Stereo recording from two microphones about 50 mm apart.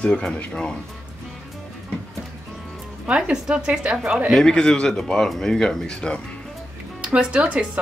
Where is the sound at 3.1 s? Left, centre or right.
Centre.